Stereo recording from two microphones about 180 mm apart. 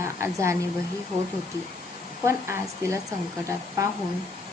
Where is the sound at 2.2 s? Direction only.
15° right (ahead or behind).